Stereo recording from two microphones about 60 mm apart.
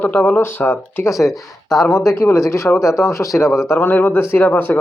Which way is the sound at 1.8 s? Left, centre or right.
Left.